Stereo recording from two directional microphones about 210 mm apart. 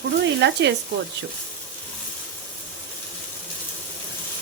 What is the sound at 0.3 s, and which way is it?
Speech, 55° right (ahead or behind).